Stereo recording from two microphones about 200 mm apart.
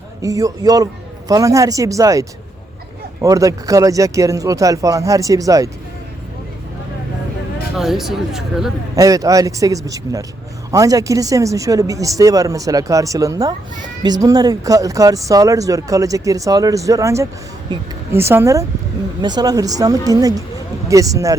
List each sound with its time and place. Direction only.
0.2 s speech: 15° right (ahead or behind)
7.8 s speech: centre (ahead or behind)
9.0 s speech: 15° right (ahead or behind)